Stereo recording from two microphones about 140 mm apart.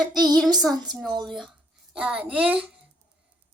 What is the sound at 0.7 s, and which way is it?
Speech, 30° right (ahead or behind).